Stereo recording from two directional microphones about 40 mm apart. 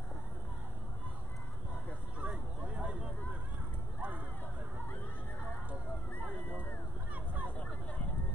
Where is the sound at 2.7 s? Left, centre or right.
Right.